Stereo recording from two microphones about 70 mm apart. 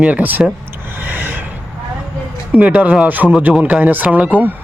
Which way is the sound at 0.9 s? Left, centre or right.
Right.